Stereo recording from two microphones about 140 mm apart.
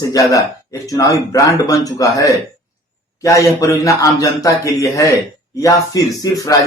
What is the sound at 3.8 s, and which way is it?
A man's voice, 25° left (ahead or behind).